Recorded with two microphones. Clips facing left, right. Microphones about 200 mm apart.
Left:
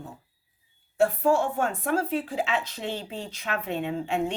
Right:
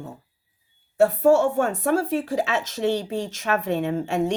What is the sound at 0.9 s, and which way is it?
A woman's voice, 40° right (ahead or behind).